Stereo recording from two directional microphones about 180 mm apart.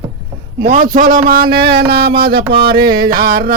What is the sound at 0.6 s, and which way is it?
Speech, 50° right (ahead or behind).